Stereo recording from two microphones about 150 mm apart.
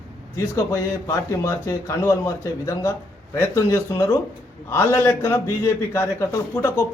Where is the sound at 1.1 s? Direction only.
20° left (ahead or behind).